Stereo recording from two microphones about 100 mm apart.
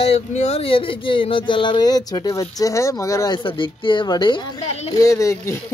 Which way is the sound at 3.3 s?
55° left (ahead or behind).